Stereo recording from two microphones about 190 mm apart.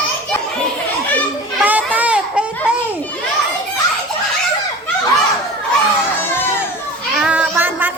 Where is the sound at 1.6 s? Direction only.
10° right (ahead or behind).